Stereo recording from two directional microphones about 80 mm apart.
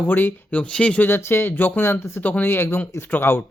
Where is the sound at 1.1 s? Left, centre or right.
Left.